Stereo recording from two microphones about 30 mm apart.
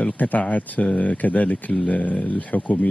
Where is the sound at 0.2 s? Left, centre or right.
Left.